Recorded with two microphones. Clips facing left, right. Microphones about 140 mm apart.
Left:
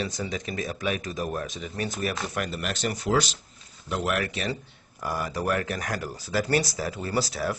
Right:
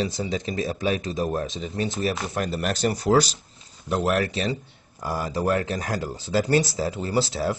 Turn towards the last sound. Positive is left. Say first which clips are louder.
# right 3 dB
turn(degrees=-25)  # may be behind; listen again after turning